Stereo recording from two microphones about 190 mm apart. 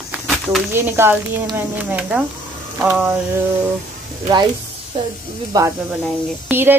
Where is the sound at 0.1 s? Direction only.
10° right (ahead or behind).